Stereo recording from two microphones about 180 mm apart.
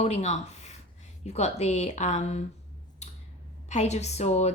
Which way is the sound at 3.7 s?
40° left (ahead or behind).